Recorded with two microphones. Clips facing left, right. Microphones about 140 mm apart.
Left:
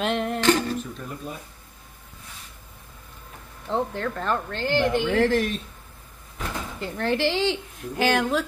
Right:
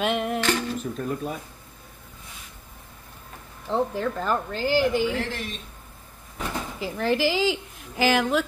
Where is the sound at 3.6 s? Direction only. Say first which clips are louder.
Right 1 dB; 5° right (ahead or behind).